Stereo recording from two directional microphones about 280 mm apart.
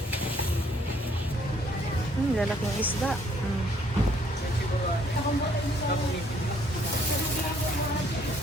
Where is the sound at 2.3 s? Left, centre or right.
Centre.